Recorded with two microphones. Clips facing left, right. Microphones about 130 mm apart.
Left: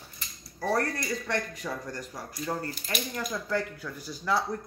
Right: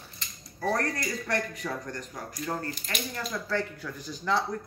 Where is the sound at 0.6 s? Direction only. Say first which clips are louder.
Left 1 dB; 5° left (ahead or behind).